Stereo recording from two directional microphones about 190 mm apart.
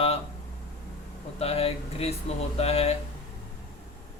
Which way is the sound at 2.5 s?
30° left (ahead or behind).